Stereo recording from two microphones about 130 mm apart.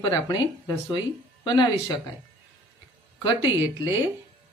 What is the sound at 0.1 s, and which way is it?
Speech, 30° left (ahead or behind).